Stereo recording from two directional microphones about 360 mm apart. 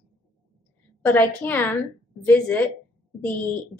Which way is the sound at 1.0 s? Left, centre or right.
Centre.